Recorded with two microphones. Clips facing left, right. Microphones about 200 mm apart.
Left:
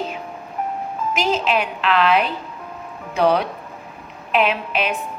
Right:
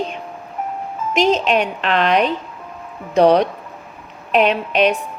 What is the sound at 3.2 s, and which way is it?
A woman's voice, 40° right (ahead or behind).